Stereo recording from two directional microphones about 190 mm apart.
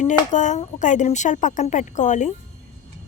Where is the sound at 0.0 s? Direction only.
40° left (ahead or behind).